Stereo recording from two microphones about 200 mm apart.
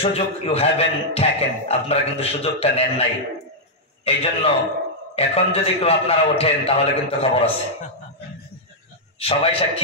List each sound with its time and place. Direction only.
0.0 s a man's voice: 30° left (ahead or behind)
9.2 s a man's voice: 30° left (ahead or behind)